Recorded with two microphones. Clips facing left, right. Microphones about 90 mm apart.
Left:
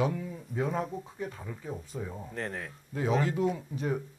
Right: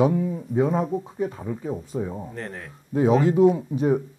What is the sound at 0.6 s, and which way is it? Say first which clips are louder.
Speech: right 8 dB; 5° right (ahead or behind).